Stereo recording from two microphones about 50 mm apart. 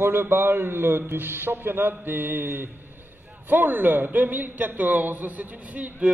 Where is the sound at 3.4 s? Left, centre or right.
Right.